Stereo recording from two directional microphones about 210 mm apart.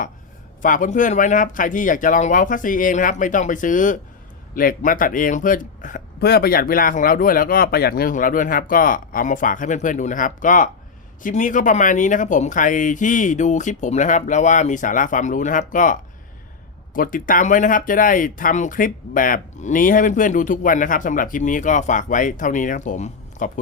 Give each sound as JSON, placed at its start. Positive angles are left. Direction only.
{"t": 0.6, "sound": "speech", "side_deg": 40}